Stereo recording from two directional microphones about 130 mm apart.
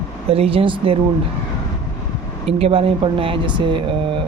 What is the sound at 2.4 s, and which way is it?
Speech, 50° right (ahead or behind).